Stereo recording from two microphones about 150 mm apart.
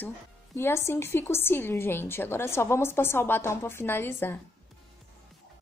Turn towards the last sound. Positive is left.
turn(degrees=15)  # may be behind; listen again after turning